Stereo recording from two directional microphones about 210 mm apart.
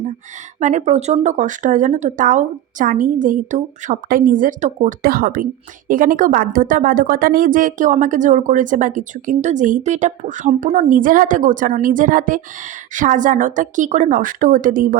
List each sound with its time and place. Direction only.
0.6 s a woman's voice: 35° right (ahead or behind)